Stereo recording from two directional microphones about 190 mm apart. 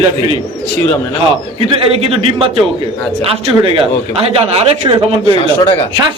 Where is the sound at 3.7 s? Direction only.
30° right (ahead or behind).